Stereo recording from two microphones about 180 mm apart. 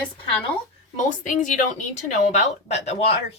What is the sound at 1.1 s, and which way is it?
Speech, 45° left (ahead or behind).